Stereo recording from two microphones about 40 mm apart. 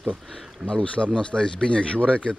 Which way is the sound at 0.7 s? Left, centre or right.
Left.